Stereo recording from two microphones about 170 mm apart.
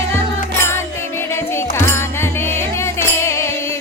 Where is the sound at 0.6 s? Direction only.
15° left (ahead or behind).